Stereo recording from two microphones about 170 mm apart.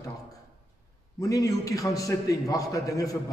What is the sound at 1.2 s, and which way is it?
A man's voice, 20° left (ahead or behind).